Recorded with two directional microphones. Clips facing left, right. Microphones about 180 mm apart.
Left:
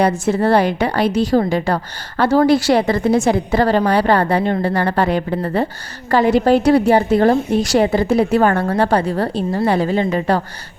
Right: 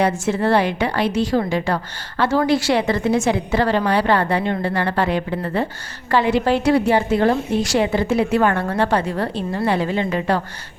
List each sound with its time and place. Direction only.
0.0 s a woman's voice: 35° left (ahead or behind)